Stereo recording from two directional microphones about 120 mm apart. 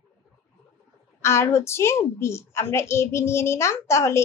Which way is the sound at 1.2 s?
20° left (ahead or behind).